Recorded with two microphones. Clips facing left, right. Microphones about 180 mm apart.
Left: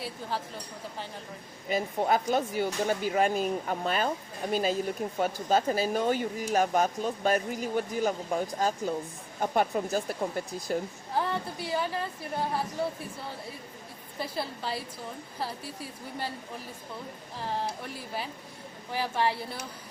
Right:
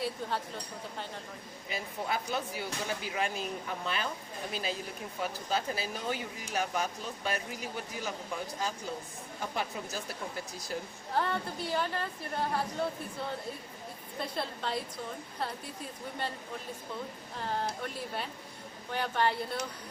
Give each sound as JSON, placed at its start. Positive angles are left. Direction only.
{"t": 0.0, "sound": "a woman's voice", "side_deg": 0}
{"t": 2.0, "sound": "speech", "side_deg": 45}
{"t": 11.1, "sound": "a woman's voice", "side_deg": 5}
{"t": 14.2, "sound": "a woman's voice", "side_deg": 5}
{"t": 17.3, "sound": "a woman's voice", "side_deg": 5}